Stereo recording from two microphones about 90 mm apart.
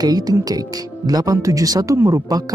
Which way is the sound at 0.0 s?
45° right (ahead or behind).